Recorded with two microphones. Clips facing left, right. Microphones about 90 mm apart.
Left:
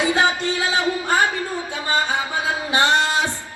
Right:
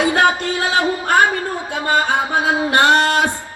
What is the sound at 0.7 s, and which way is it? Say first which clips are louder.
Music: right 5 dB; 60° right (ahead or behind).